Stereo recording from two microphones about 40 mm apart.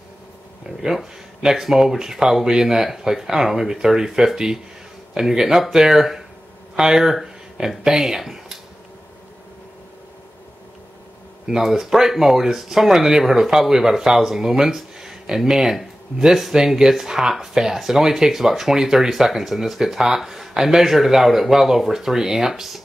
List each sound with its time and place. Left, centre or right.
0.7 s speech: centre
7.8 s speech: centre
11.7 s speech: centre